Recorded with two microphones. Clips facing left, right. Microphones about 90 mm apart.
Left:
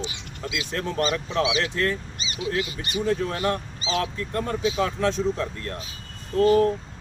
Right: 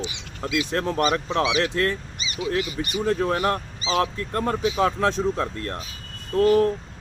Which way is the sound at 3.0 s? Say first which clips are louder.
Right 2 dB; 45° right (ahead or behind).